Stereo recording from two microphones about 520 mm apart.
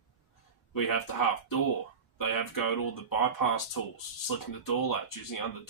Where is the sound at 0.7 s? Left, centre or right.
Left.